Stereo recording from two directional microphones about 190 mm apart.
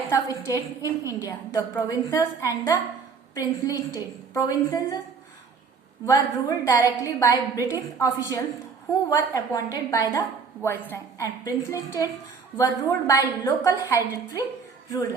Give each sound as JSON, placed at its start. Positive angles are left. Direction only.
{"t": 0.1, "sound": "a woman's voice", "side_deg": 15}
{"t": 6.1, "sound": "a woman's voice", "side_deg": 20}